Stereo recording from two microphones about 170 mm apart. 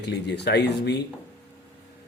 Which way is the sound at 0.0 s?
80° left.